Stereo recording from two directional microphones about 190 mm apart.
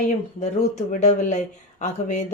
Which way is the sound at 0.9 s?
40° left (ahead or behind).